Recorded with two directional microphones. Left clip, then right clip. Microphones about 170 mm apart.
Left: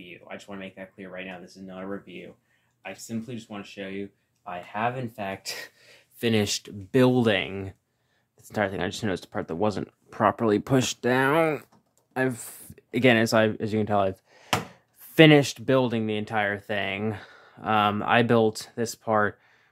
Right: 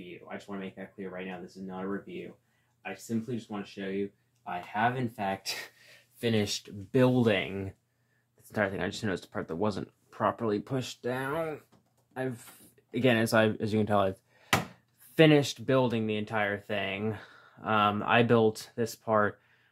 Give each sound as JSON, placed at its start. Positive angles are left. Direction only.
{"t": 0.6, "sound": "speech", "side_deg": 20}
{"t": 3.4, "sound": "speech", "side_deg": 20}
{"t": 6.1, "sound": "speech", "side_deg": 45}
{"t": 10.6, "sound": "speech", "side_deg": 55}
{"t": 12.1, "sound": "speech", "side_deg": 35}
{"t": 12.9, "sound": "speech", "side_deg": 20}
{"t": 15.1, "sound": "speech", "side_deg": 25}